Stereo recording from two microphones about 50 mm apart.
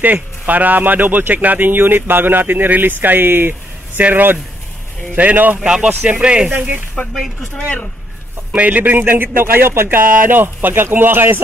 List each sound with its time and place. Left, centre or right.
0.0 s speech: right
5.6 s speech: centre
7.0 s speech: centre
8.5 s a man's voice: right
8.9 s speech: right
9.8 s speech: right